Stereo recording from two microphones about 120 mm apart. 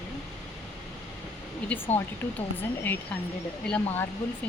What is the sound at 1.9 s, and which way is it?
Speech, 15° left (ahead or behind).